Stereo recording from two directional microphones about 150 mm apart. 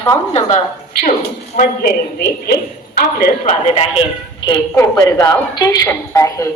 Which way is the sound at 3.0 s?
80° left.